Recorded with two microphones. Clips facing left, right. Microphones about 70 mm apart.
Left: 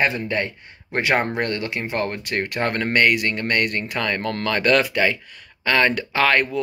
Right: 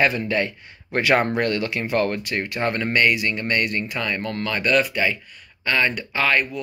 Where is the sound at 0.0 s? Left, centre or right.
Left.